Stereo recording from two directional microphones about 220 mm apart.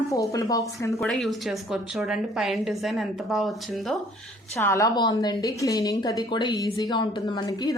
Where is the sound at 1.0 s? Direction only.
Centre (ahead or behind).